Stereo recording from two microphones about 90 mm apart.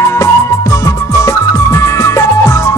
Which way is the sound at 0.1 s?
35° left (ahead or behind).